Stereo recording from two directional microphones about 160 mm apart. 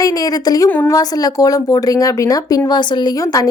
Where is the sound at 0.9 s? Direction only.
25° left (ahead or behind).